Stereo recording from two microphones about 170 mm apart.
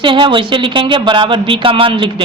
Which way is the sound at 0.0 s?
30° right (ahead or behind).